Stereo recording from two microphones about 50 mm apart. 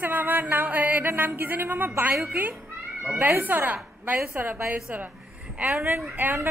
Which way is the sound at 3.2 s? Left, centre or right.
Right.